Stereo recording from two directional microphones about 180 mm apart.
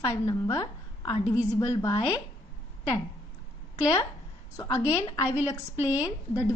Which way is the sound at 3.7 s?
20° left (ahead or behind).